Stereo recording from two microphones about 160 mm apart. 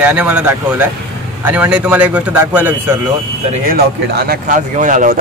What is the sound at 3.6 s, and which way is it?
Speech, 70° right (ahead or behind).